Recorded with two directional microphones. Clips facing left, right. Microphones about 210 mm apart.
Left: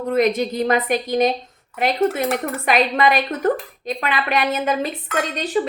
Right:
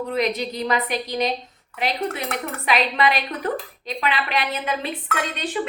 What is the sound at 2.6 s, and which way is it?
A woman's voice, 50° left (ahead or behind).